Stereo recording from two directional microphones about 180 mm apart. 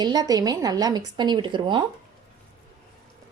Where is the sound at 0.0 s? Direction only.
20° right (ahead or behind).